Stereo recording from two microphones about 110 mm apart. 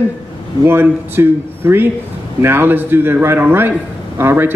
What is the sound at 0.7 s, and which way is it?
Speech, 20° right (ahead or behind).